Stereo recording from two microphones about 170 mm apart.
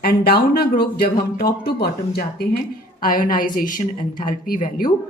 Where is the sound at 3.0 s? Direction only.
55° left (ahead or behind).